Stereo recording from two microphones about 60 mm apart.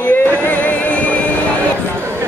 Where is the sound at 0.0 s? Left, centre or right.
Left.